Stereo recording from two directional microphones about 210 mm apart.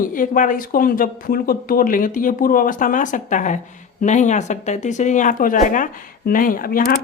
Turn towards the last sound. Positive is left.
turn(degrees=45)  # may be behind; listen again after turning